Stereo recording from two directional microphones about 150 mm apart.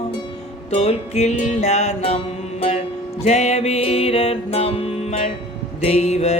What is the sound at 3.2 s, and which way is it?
Music, 45° left (ahead or behind).